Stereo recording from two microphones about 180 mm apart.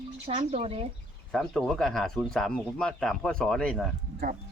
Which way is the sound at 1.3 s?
Centre (ahead or behind).